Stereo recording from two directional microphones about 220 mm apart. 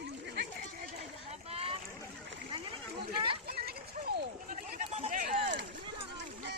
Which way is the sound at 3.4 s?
45° right (ahead or behind).